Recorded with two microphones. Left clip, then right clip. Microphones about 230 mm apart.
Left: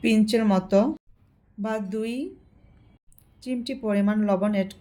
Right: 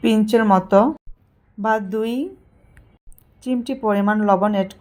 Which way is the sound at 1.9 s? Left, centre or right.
Centre.